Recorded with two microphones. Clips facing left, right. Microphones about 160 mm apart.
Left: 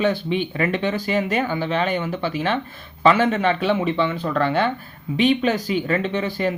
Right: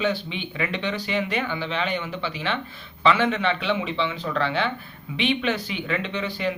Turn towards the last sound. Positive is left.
turn(degrees=45)  # may be behind; listen again after turning